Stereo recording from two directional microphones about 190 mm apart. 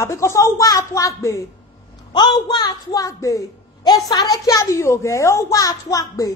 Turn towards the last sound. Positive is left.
turn(degrees=20)  # may be behind; listen again after turning